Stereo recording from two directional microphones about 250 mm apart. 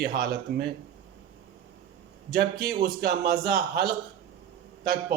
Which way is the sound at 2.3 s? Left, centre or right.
Right.